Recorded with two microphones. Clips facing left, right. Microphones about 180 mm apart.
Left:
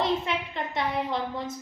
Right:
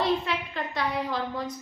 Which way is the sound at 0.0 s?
20° left (ahead or behind).